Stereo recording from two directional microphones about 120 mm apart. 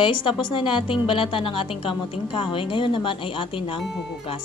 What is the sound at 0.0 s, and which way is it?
A woman's voice, 45° left (ahead or behind).